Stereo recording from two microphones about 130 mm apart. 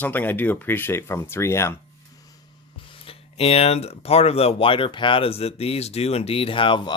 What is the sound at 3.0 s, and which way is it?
Speech, 50° left (ahead or behind).